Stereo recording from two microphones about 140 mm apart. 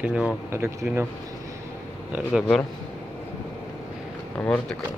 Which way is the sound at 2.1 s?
5° right (ahead or behind).